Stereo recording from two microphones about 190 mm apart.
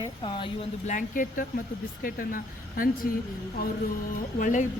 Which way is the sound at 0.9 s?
45° left (ahead or behind).